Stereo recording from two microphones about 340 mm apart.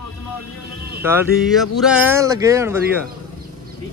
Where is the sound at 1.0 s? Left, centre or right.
Centre.